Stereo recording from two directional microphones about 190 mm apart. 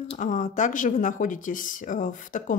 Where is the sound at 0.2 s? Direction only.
40° left (ahead or behind).